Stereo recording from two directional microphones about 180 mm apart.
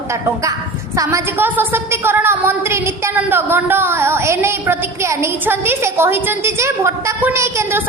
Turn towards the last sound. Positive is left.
turn(degrees=-15)  # may be behind; listen again after turning